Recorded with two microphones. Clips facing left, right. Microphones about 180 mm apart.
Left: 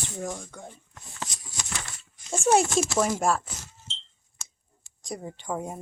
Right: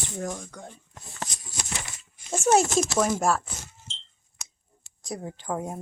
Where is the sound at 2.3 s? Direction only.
Centre (ahead or behind).